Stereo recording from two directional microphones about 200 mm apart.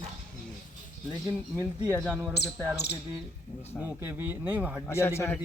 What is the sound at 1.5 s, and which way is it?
Speech, 15° right (ahead or behind).